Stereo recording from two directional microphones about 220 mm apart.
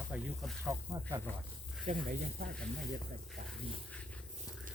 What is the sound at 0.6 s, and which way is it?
Speech, 15° right (ahead or behind).